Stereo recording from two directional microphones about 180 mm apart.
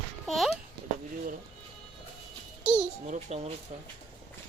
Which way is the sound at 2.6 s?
5° right (ahead or behind).